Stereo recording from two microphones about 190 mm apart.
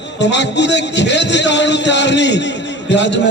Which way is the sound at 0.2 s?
65° left (ahead or behind).